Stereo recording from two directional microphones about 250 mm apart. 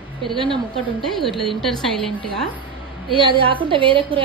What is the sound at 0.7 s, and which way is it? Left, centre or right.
A woman's voice, centre.